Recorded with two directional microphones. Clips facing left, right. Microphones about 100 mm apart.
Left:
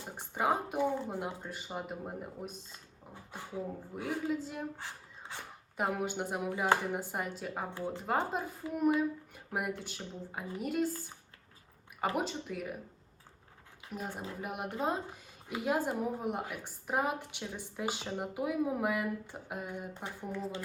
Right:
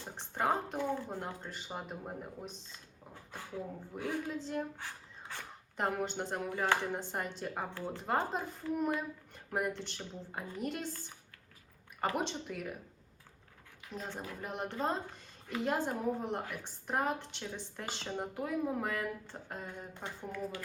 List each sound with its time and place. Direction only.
0.0 s speech: 10° left (ahead or behind)
3.1 s speech: 15° left (ahead or behind)
7.7 s speech: 15° left (ahead or behind)
13.9 s speech: 10° left (ahead or behind)